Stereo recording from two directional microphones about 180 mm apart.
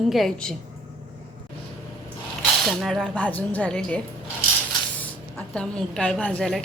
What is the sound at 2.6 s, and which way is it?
A woman's voice, centre (ahead or behind).